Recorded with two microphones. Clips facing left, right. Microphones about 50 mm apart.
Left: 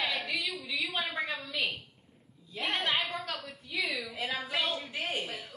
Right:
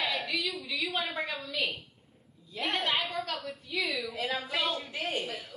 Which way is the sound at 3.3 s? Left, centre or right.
Centre.